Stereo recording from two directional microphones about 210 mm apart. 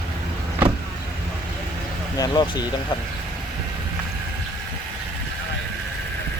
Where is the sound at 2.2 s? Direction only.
20° left (ahead or behind).